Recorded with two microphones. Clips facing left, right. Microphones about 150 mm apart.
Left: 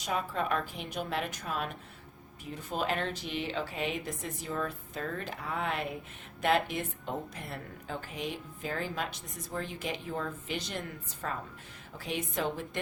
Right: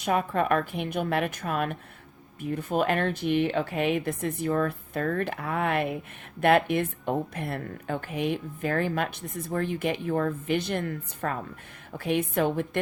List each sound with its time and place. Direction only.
0.0 s speech: 60° right (ahead or behind)